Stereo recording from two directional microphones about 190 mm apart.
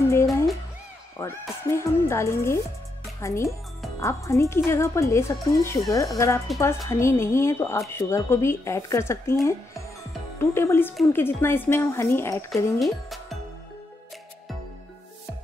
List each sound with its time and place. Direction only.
0.1 s music: 15° left (ahead or behind)
1.7 s speech: 15° left (ahead or behind)
12.7 s speech: centre (ahead or behind)